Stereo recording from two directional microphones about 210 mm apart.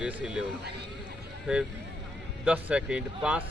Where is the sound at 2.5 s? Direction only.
5° right (ahead or behind).